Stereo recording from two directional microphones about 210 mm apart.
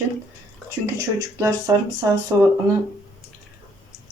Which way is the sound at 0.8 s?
15° right (ahead or behind).